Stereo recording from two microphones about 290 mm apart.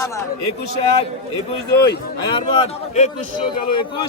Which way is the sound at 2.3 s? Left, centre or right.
Centre.